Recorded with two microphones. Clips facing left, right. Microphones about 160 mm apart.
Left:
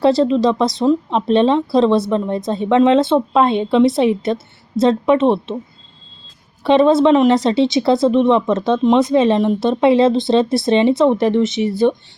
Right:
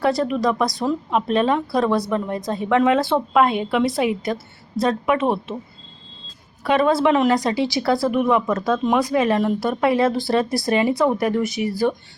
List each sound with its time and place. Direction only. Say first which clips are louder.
0.0 s speech: left 6 dB; 25° left (ahead or behind)
6.7 s speech: left 6 dB; 25° left (ahead or behind)